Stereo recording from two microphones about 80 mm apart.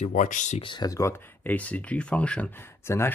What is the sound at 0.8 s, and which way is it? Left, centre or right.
Speech, left.